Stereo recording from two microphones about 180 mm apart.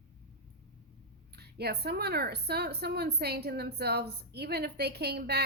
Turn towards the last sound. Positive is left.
turn(degrees=-65)  # may be behind; listen again after turning